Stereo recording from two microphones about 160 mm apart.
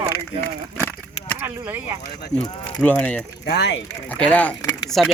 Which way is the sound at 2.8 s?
10° left (ahead or behind).